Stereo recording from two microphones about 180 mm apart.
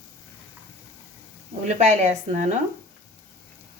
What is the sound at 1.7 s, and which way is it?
Speech, 40° right (ahead or behind).